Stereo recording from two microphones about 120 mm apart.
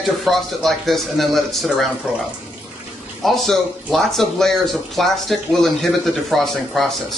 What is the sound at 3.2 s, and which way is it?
Speech, centre (ahead or behind).